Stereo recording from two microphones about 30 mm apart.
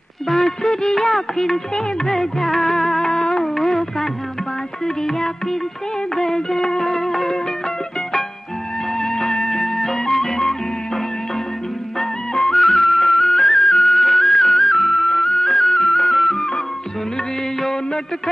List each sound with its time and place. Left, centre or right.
0.3 s music of bollywood: centre
2.0 s music: centre
3.5 s music: centre
9.0 s music: centre
12.0 s music: centre